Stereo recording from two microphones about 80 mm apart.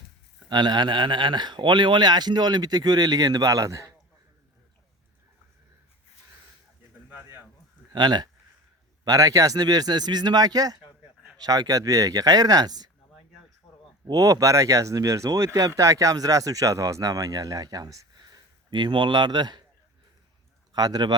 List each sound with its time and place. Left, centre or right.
0.4 s speech: right
7.9 s speech: right
9.0 s speech: right
14.1 s speech: right
20.7 s speech: right